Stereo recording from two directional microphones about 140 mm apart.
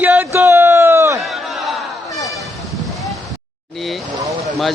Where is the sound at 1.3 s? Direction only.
Centre (ahead or behind).